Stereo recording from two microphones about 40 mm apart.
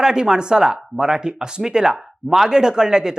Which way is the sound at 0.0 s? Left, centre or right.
Centre.